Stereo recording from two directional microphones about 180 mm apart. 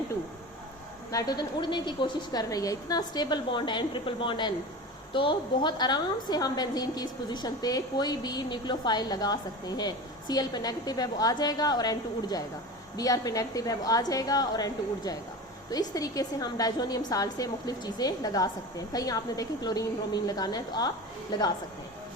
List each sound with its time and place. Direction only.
1.1 s a woman's voice: 20° left (ahead or behind)